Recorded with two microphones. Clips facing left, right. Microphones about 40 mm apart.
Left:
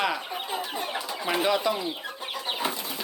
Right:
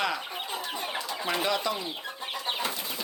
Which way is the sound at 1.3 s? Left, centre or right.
Centre.